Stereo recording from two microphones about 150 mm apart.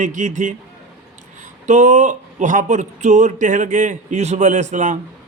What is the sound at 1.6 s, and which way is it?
Speech, 50° right (ahead or behind).